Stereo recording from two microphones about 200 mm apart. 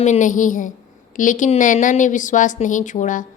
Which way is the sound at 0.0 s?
35° left (ahead or behind).